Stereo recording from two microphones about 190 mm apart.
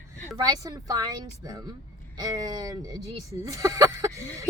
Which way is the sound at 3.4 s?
20° right (ahead or behind).